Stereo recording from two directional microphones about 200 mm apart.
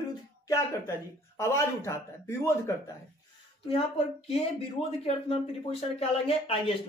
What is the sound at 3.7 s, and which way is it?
Speech, 30° left (ahead or behind).